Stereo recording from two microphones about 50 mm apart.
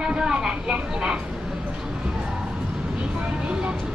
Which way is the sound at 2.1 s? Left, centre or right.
Centre.